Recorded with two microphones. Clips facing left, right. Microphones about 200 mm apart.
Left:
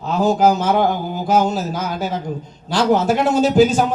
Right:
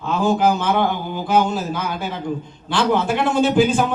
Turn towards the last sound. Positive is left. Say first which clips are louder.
# left 2 dB
turn(degrees=40)  # may be behind; listen again after turning